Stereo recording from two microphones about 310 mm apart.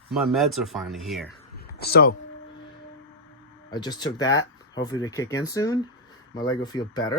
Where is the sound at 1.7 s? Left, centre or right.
Left.